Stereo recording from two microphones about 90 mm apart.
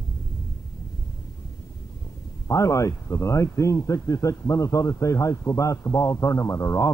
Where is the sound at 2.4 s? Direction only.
35° left (ahead or behind).